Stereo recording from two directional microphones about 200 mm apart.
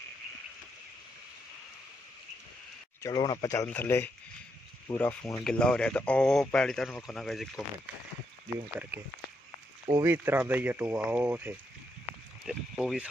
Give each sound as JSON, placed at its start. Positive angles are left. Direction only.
{"t": 3.0, "sound": "speech", "side_deg": 20}
{"t": 8.9, "sound": "speech", "side_deg": -10}